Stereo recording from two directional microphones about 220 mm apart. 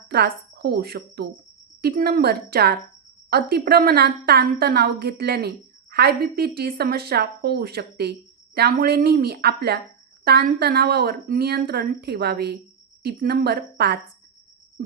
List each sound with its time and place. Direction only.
0.1 s speech: 45° right (ahead or behind)